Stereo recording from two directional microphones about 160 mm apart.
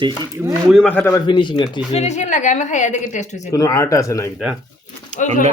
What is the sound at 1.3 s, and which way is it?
Speech, 30° left (ahead or behind).